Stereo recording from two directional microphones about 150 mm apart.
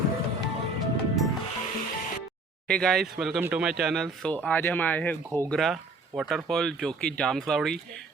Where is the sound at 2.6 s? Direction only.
5° left (ahead or behind).